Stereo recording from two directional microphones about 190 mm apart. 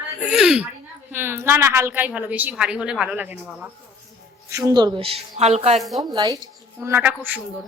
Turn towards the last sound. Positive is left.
turn(degrees=-10)  # may be behind; listen again after turning